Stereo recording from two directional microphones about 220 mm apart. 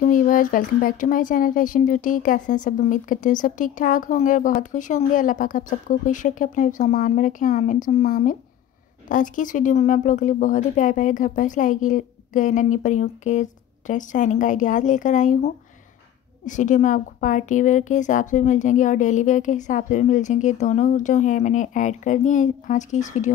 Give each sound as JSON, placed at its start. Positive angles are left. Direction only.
{"t": 0.0, "sound": "speech", "side_deg": 40}